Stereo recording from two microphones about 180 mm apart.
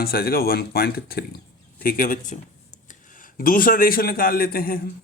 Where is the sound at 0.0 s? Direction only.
60° left (ahead or behind).